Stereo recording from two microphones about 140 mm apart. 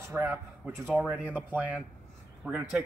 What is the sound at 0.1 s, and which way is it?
A man's voice, 15° right (ahead or behind).